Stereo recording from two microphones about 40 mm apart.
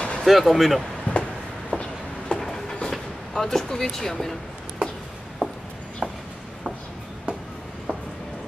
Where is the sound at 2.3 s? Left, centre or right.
Centre.